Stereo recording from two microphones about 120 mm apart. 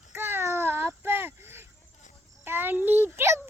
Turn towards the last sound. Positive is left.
turn(degrees=-20)  # may be behind; listen again after turning